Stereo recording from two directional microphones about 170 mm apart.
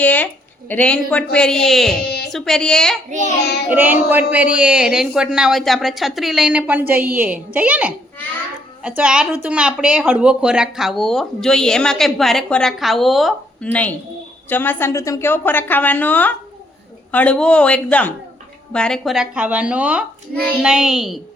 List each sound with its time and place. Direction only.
0.0 s speech: 10° left (ahead or behind)
2.0 s a sound: 65° left (ahead or behind)
2.3 s speech: centre (ahead or behind)
3.7 s a man's voice: 10° right (ahead or behind)
14.5 s a woman's voice: 10° left (ahead or behind)